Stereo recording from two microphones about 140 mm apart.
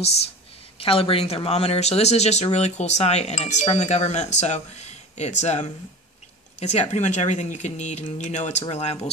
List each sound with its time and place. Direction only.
0.7 s speech: 40° left (ahead or behind)